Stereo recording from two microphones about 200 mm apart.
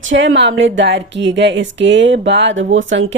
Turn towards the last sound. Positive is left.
turn(degrees=-70)  # may be behind; listen again after turning